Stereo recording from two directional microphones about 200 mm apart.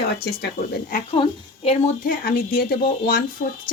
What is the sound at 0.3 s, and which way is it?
Speech, 50° left (ahead or behind).